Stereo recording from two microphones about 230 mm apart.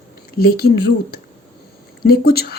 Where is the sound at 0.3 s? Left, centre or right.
Left.